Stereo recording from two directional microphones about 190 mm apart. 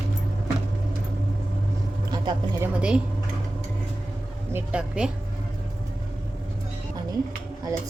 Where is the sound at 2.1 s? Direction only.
20° right (ahead or behind).